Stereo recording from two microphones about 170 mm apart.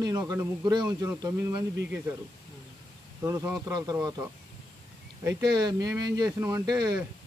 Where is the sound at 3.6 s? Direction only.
20° right (ahead or behind).